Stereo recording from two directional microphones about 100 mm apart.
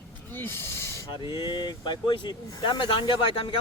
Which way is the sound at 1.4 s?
50° left (ahead or behind).